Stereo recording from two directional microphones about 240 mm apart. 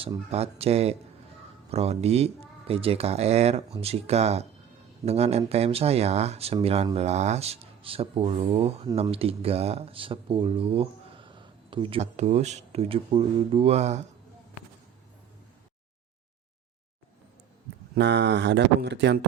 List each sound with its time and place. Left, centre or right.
0.0 s speech: right
17.9 s speech: right